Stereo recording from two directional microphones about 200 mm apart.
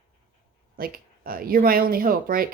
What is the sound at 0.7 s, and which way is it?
Speech, 45° right (ahead or behind).